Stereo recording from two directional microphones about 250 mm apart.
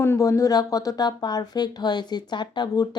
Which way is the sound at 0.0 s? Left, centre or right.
Centre.